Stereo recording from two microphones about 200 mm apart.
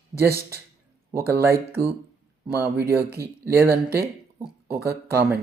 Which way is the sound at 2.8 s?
50° right (ahead or behind).